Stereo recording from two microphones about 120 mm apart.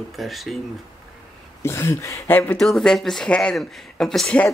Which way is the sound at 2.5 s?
5° left (ahead or behind).